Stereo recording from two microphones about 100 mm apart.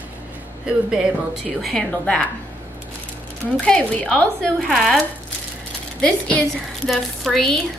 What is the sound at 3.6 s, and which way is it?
A woman's voice, 10° left (ahead or behind).